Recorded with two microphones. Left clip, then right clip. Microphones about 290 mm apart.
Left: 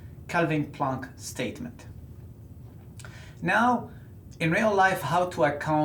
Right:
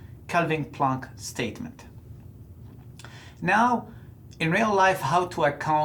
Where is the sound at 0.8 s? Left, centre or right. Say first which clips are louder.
Right 5 dB; right.